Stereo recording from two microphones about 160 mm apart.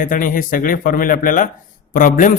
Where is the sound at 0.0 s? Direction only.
60° left (ahead or behind).